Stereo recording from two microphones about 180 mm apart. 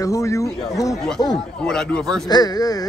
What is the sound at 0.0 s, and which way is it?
Speech, 15° left (ahead or behind).